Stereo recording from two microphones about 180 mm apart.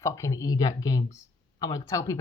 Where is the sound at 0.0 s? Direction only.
15° left (ahead or behind).